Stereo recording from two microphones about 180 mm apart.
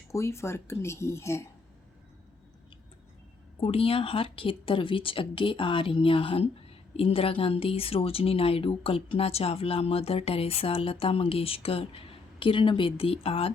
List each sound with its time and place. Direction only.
0.1 s speech: 15° left (ahead or behind)
3.6 s speech: 30° left (ahead or behind)